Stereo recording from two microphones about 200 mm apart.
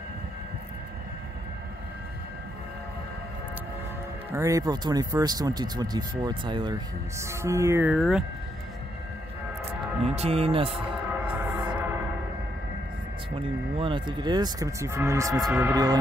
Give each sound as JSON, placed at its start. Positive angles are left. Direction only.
{"t": 4.3, "sound": "speech", "side_deg": -15}
{"t": 10.0, "sound": "speech", "side_deg": -30}
{"t": 11.2, "sound": "music", "side_deg": -5}
{"t": 13.4, "sound": "speech", "side_deg": -25}